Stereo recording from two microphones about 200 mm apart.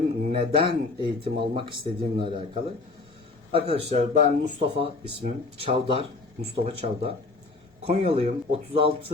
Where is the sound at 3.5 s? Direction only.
30° right (ahead or behind).